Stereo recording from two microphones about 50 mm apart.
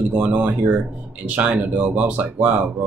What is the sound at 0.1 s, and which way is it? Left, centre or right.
Speech, right.